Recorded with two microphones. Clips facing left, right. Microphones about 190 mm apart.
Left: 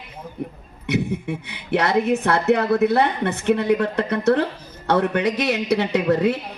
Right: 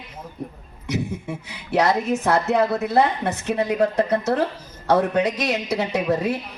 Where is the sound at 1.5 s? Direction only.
60° left (ahead or behind).